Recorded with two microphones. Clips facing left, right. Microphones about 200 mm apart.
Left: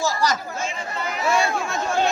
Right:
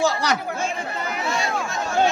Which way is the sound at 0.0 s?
65° right (ahead or behind).